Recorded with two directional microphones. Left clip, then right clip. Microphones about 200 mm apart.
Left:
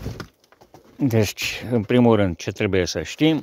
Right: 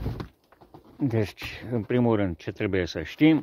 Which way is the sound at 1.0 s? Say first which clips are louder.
Left 7 dB; 55° left (ahead or behind).